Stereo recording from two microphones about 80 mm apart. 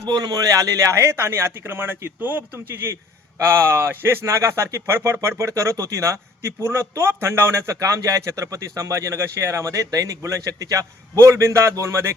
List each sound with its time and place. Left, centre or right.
0.1 s a man's voice: right